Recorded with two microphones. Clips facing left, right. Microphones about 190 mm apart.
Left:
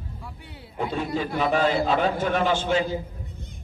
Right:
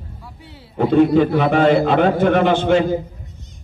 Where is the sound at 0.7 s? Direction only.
65° right (ahead or behind).